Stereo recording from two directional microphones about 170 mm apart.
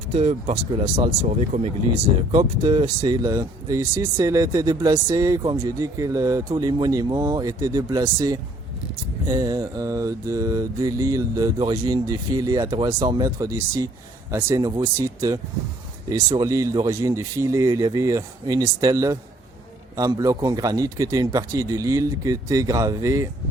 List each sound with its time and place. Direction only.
0.1 s speech: 40° right (ahead or behind)
2.3 s speech: 25° right (ahead or behind)